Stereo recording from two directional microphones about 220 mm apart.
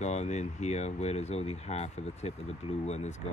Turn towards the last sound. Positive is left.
turn(degrees=30)  # may be behind; listen again after turning